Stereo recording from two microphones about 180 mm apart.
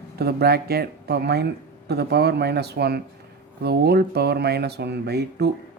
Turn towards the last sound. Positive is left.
turn(degrees=-65)  # may be behind; listen again after turning